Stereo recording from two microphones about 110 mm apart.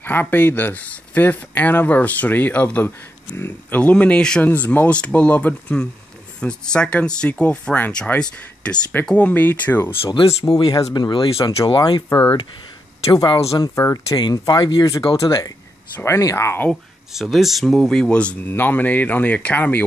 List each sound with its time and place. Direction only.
0.0 s speech: 15° left (ahead or behind)
10.4 s speech: 35° left (ahead or behind)
12.1 s speech: 20° left (ahead or behind)
13.1 s speech: 35° left (ahead or behind)
15.1 s speech: 30° left (ahead or behind)
17.1 s speech: centre (ahead or behind); by 19.8 s 15° left (ahead or behind)